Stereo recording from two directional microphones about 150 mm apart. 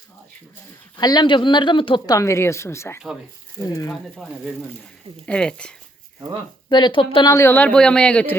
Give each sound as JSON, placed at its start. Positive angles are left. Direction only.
{"t": 0.9, "sound": "speech", "side_deg": 25}
{"t": 2.1, "sound": "speech", "side_deg": 20}
{"t": 3.9, "sound": "speech", "side_deg": 0}
{"t": 6.7, "sound": "speech", "side_deg": 30}